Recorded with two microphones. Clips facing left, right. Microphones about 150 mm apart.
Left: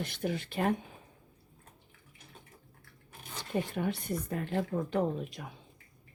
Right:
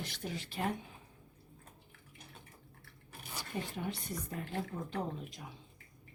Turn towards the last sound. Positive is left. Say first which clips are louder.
# left 8 dB
turn(degrees=60)  # may be behind; listen again after turning